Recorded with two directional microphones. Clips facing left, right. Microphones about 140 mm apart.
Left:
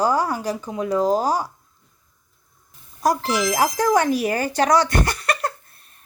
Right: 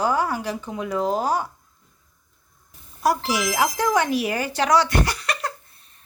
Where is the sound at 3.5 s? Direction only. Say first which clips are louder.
Left 3 dB; 45° left (ahead or behind).